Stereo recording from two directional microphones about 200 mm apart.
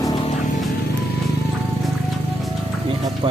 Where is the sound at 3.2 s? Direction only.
25° right (ahead or behind).